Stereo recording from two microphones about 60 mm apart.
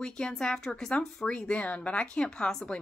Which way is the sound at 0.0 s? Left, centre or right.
Centre.